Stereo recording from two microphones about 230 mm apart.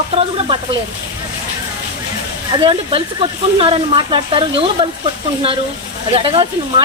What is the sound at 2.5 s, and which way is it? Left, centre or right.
Speech, centre.